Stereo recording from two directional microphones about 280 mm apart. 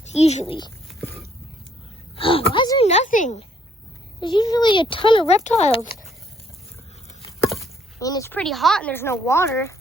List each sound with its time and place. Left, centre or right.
0.1 s speech: left
2.1 s speech: centre
4.4 s speech: centre
7.2 s a sound: centre
7.9 s speech: centre